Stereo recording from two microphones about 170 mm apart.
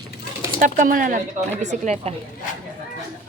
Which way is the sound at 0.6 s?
50° right (ahead or behind).